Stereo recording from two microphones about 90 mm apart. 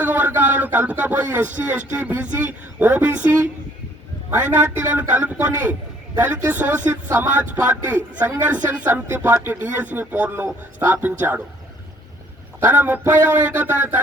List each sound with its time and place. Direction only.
0.0 s speech: 20° right (ahead or behind)
12.6 s speech: 20° right (ahead or behind)